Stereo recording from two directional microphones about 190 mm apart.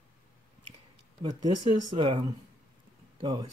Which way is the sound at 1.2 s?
25° right (ahead or behind).